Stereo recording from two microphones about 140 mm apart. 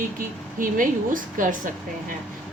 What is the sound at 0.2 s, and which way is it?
A woman's voice, 75° right (ahead or behind).